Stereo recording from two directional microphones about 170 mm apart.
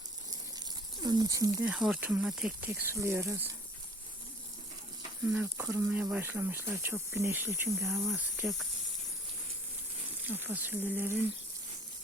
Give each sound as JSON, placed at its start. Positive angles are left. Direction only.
{"t": 1.0, "sound": "speech", "side_deg": -25}
{"t": 1.6, "sound": "speech", "side_deg": -5}
{"t": 2.6, "sound": "speech", "side_deg": -15}
{"t": 5.3, "sound": "speech", "side_deg": -5}
{"t": 5.9, "sound": "speech", "side_deg": -5}
{"t": 7.8, "sound": "speech", "side_deg": 0}
{"t": 10.2, "sound": "speech", "side_deg": -10}